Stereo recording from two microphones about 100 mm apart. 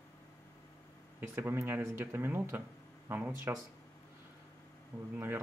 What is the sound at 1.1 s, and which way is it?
Speech, 25° right (ahead or behind).